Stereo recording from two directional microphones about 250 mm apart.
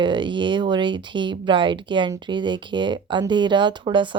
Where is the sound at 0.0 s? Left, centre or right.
Centre.